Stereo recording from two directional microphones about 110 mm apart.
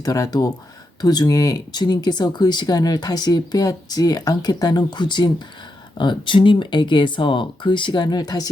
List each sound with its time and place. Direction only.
0.0 s speech: 30° left (ahead or behind)